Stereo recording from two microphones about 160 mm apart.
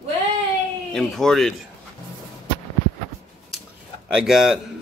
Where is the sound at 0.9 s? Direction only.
Centre (ahead or behind).